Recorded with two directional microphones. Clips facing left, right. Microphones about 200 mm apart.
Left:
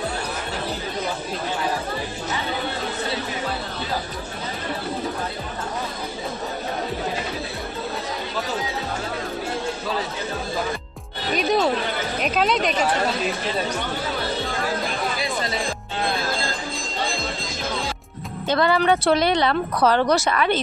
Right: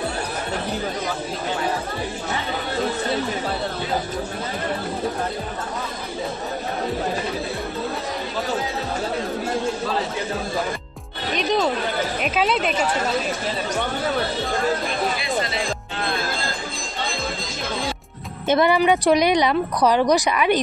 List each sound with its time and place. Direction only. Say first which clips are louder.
11.3 s speech: left 1 dB; centre (ahead or behind)
18.5 s speech: right 2 dB; 20° right (ahead or behind)